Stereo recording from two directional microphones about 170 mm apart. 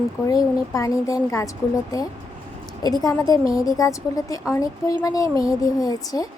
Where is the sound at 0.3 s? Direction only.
20° left (ahead or behind).